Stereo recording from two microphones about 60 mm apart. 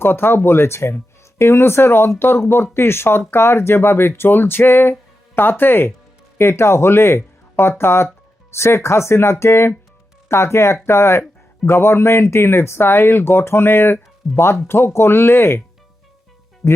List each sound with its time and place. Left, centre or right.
0.0 s speech: left
16.6 s speech: left